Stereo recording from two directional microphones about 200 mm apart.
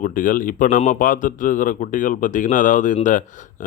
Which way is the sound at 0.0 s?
45° left (ahead or behind).